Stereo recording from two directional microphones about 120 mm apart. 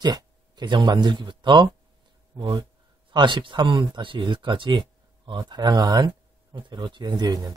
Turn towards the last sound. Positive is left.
turn(degrees=-35)  # may be behind; listen again after turning